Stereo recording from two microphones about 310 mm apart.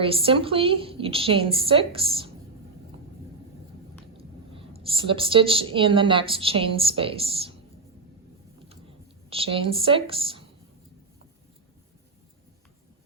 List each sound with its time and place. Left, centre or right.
0.0 s a woman's voice: centre
4.7 s a woman's voice: centre
9.3 s a woman's voice: centre